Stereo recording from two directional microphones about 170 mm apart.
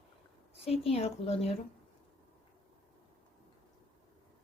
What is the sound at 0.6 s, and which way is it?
Speech, 35° left (ahead or behind).